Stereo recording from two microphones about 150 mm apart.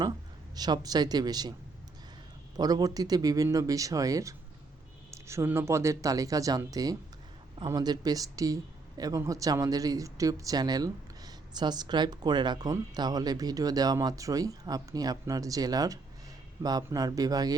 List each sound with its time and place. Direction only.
0.5 s speech: 25° right (ahead or behind)
2.6 s speech: 25° right (ahead or behind)